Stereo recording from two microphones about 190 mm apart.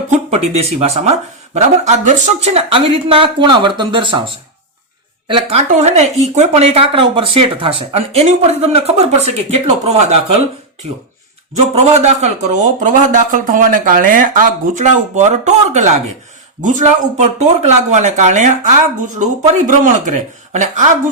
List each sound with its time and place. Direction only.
0.1 s speech: 35° right (ahead or behind)
5.3 s speech: 35° right (ahead or behind)
11.8 s speech: 35° right (ahead or behind)